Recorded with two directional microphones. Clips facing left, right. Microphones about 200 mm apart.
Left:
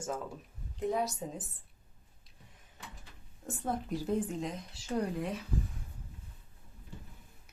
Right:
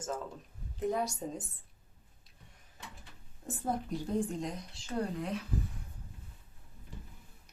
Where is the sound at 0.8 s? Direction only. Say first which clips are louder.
Even; centre (ahead or behind).